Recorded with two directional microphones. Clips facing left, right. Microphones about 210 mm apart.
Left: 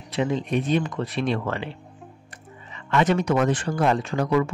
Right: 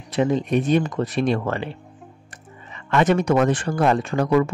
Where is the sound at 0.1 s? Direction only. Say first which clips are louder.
Right 4 dB; 45° right (ahead or behind).